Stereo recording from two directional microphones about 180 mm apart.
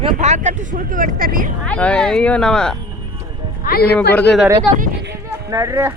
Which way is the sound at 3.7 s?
55° left (ahead or behind).